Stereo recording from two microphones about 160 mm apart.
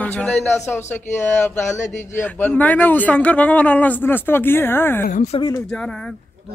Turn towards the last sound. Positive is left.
turn(degrees=35)  # may be behind; listen again after turning